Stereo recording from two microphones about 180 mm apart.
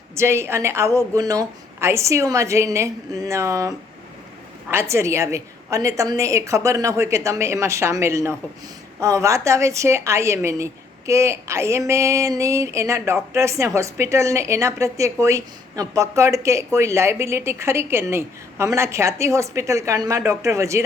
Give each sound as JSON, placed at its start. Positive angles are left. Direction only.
{"t": 0.2, "sound": "a woman's voice", "side_deg": -15}